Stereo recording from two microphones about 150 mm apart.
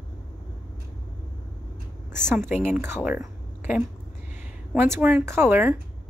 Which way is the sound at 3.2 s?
15° right (ahead or behind).